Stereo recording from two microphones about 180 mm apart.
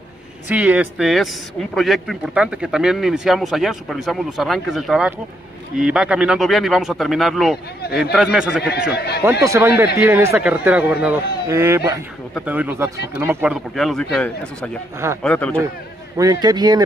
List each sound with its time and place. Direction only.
0.5 s speech: 10° right (ahead or behind)
8.9 s speech: 65° left (ahead or behind)
9.4 s speech: 15° right (ahead or behind)
13.7 s speech: centre (ahead or behind)
16.2 s a man's voice: 20° right (ahead or behind)